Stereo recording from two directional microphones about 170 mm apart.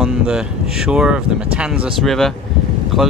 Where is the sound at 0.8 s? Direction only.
5° right (ahead or behind).